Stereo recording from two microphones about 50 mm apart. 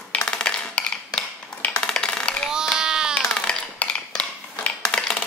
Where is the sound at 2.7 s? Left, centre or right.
Centre.